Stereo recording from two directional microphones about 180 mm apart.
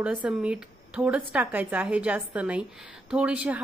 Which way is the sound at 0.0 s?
5° right (ahead or behind).